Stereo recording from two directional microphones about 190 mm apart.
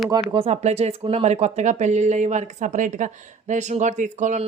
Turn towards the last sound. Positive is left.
turn(degrees=-40)  # may be behind; listen again after turning